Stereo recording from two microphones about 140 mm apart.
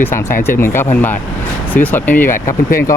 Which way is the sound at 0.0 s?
15° left (ahead or behind).